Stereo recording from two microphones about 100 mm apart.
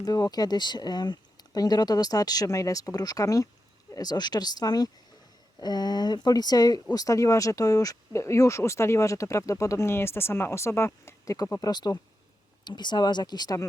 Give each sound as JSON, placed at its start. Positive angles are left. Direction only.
{"t": 0.0, "sound": "speech", "side_deg": 40}
{"t": 11.6, "sound": "speech", "side_deg": 40}